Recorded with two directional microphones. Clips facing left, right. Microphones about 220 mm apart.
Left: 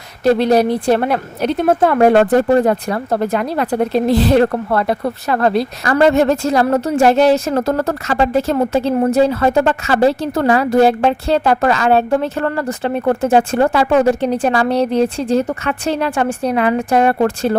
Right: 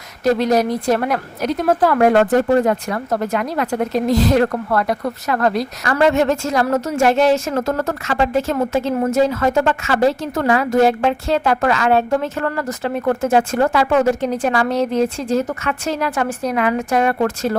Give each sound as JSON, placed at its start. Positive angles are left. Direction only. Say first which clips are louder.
{"t": 0.3, "sound": "a woman's voice", "louder": "left 3 dB", "side_deg": 30}